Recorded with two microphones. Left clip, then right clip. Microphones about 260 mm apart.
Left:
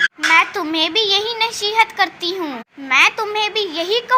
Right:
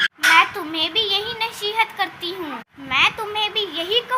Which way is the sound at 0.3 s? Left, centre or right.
Left.